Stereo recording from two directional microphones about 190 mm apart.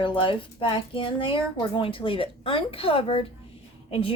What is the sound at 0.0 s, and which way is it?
Speech, 25° left (ahead or behind).